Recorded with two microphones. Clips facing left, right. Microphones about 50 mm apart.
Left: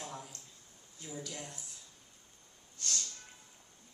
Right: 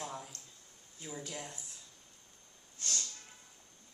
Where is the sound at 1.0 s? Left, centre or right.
Centre.